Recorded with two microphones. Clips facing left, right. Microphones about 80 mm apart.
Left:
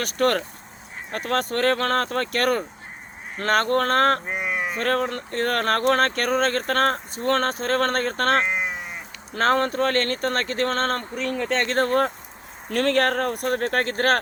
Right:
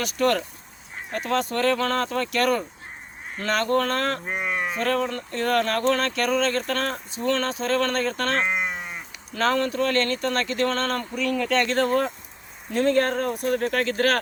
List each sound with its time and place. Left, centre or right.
0.0 s speech: left
4.3 s speech: centre
4.8 s speech: left
8.4 s cat: centre
9.3 s speech: left
12.7 s speech: left